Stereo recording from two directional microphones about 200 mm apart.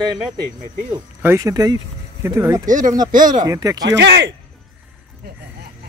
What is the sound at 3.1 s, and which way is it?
Speech, 40° right (ahead or behind).